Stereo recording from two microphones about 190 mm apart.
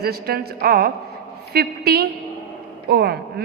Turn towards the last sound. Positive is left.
turn(degrees=-55)  # may be behind; listen again after turning